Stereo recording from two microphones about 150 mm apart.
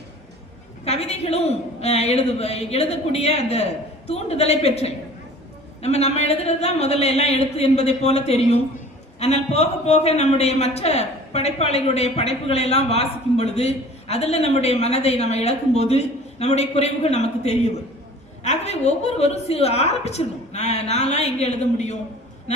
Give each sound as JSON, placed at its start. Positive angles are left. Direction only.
{"t": 0.9, "sound": "a man's voice", "side_deg": 45}